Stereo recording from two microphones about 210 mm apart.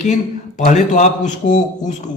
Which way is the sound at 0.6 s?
35° left (ahead or behind).